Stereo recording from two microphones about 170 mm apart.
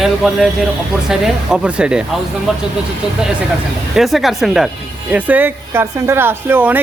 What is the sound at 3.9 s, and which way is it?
Speech, centre (ahead or behind).